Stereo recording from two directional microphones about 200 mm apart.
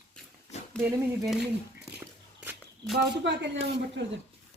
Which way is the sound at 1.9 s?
5° right (ahead or behind).